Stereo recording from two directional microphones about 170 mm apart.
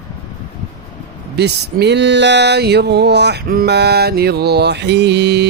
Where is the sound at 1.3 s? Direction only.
80° right.